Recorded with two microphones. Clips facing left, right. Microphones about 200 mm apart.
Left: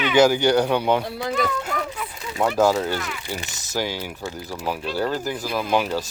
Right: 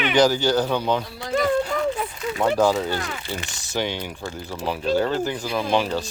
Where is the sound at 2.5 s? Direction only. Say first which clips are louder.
Left 2 dB; 5° left (ahead or behind).